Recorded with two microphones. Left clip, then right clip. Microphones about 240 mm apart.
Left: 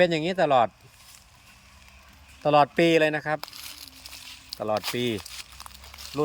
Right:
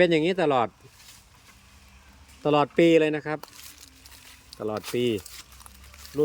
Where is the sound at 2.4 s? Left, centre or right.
Centre.